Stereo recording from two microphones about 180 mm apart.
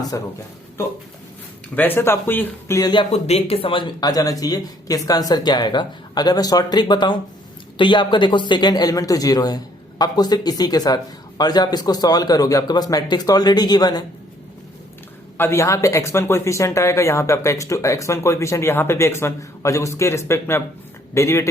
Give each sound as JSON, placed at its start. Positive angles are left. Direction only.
{"t": 0.1, "sound": "speech", "side_deg": 20}
{"t": 1.7, "sound": "speech", "side_deg": 10}
{"t": 15.4, "sound": "speech", "side_deg": 15}